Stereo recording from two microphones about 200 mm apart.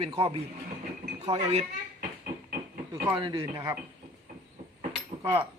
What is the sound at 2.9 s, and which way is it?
Speech, 20° right (ahead or behind).